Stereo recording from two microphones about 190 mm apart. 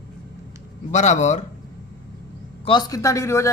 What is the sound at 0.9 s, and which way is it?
Speech, 40° left (ahead or behind).